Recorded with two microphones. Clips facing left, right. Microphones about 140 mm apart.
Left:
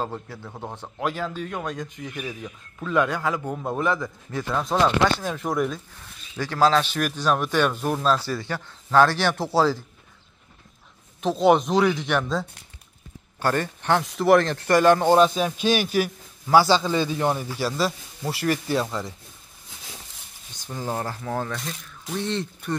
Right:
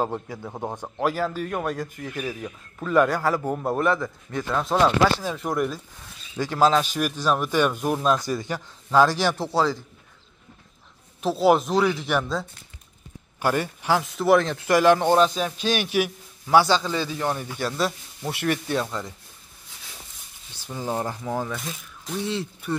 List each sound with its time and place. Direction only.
0.0 s speech: 15° right (ahead or behind)
1.0 s a man's voice: 5° right (ahead or behind)
6.3 s speech: 15° right (ahead or behind); by 9.8 s 5° left (ahead or behind)
11.1 s a man's voice: 5° right (ahead or behind)
20.6 s speech: 10° right (ahead or behind)
21.5 s a man's voice: centre (ahead or behind)